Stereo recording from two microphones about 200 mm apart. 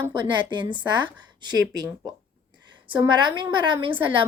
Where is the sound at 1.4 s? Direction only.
20° right (ahead or behind).